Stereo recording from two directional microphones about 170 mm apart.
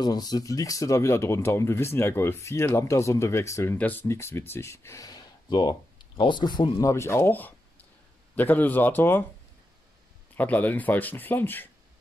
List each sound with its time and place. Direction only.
0.0 s speech: 25° left (ahead or behind)
10.3 s speech: 10° left (ahead or behind)